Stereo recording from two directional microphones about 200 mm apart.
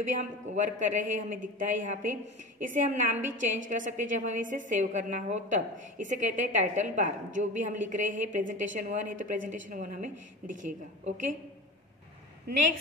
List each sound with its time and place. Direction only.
0.1 s a woman's voice: 40° right (ahead or behind)